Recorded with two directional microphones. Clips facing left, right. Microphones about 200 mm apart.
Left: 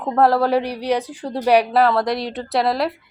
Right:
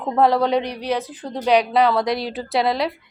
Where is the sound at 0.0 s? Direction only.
5° left (ahead or behind).